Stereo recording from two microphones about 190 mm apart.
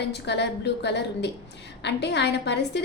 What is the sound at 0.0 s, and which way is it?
A woman's voice, 65° left (ahead or behind).